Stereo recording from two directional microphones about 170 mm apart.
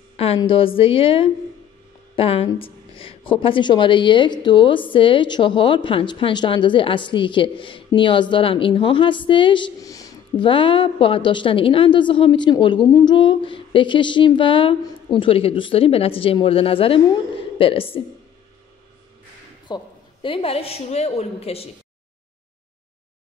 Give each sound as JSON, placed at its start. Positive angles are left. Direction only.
{"t": 0.4, "sound": "a woman's voice", "side_deg": 30}
{"t": 19.7, "sound": "a woman's voice", "side_deg": 30}